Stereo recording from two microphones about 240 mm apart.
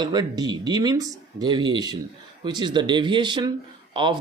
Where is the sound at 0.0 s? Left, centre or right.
Centre.